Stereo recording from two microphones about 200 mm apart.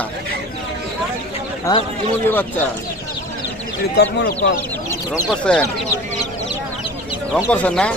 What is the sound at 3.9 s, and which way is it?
Speech, 55° left (ahead or behind).